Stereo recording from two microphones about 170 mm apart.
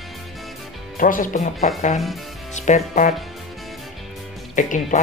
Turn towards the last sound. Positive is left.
turn(degrees=50)  # may be behind; listen again after turning